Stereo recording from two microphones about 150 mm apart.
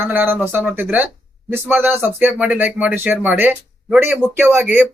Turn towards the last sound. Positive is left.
turn(degrees=-10)  # may be behind; listen again after turning